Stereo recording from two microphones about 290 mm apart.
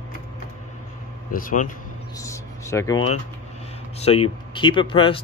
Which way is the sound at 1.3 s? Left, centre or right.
Left.